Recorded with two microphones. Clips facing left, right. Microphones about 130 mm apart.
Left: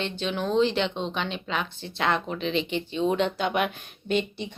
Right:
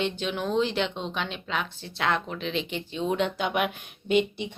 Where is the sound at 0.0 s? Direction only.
5° right (ahead or behind).